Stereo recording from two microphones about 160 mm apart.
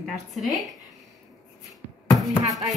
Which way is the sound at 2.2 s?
20° right (ahead or behind).